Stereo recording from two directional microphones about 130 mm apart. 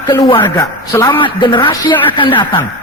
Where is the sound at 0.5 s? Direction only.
30° left (ahead or behind).